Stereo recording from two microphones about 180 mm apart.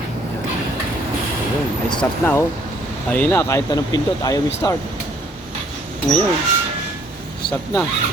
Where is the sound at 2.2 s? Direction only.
10° left (ahead or behind).